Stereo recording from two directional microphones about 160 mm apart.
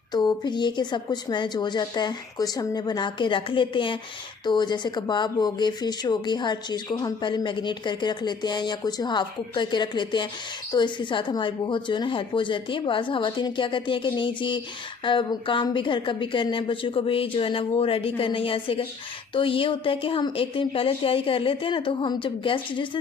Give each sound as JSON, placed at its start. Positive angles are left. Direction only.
{"t": 0.1, "sound": "speech", "side_deg": 25}